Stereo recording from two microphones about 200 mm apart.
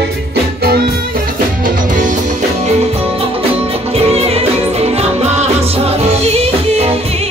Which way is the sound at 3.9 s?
30° right (ahead or behind).